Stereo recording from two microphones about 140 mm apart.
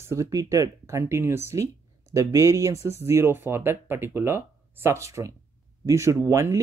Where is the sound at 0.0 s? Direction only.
20° right (ahead or behind).